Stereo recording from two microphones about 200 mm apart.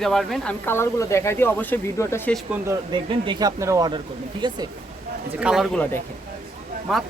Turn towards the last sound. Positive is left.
turn(degrees=0)  # may be behind; listen again after turning